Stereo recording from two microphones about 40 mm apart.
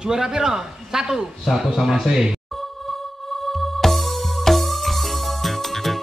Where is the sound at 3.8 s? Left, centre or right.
Centre.